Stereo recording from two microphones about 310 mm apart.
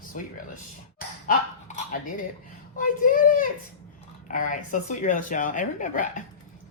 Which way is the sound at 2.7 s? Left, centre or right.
Left.